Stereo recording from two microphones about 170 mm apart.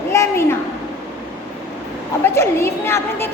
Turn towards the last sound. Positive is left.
turn(degrees=15)  # may be behind; listen again after turning